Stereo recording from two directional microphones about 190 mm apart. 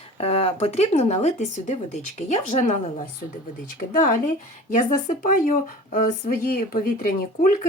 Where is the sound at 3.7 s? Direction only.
45° left (ahead or behind).